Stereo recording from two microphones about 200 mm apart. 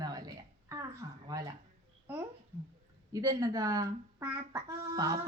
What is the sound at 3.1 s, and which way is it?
A child's voice, 15° right (ahead or behind).